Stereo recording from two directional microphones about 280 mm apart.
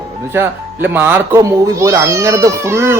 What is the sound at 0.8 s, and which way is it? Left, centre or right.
Speech, centre.